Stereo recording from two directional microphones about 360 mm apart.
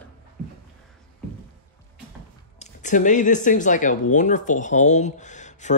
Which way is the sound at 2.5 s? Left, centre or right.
Left.